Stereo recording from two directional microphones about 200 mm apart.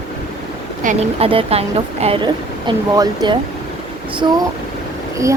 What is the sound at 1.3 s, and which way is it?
Speech, 30° right (ahead or behind).